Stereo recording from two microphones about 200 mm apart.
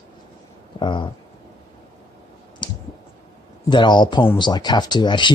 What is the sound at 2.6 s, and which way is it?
Clicking, 25° left (ahead or behind).